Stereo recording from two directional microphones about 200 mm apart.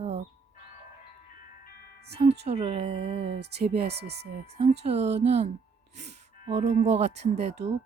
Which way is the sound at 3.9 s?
55° right (ahead or behind).